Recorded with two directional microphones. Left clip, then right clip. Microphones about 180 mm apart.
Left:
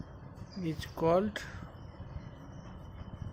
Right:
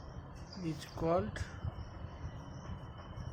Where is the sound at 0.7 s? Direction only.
35° left (ahead or behind).